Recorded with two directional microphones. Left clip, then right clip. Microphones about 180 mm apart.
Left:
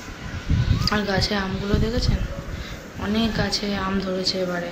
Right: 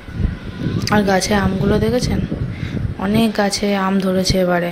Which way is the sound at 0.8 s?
40° right (ahead or behind).